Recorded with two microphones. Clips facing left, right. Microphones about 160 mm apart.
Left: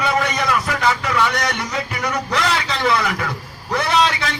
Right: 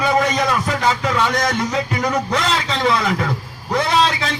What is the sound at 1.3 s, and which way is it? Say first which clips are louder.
A man's voice: right 4 dB; 40° right (ahead or behind).